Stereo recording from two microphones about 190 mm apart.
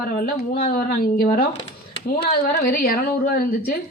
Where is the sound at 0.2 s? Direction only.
50° left (ahead or behind).